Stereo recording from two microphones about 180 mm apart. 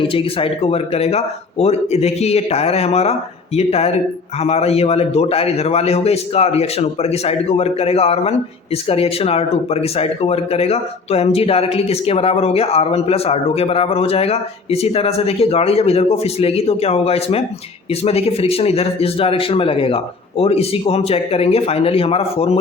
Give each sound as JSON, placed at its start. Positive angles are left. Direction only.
{"t": 0.0, "sound": "a man's voice", "side_deg": 30}